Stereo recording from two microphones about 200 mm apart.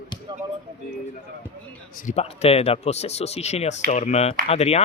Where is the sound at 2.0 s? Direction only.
35° left (ahead or behind).